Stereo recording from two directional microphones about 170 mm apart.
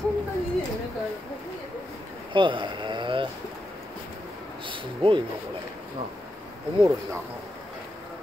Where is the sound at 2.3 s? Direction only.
30° right (ahead or behind).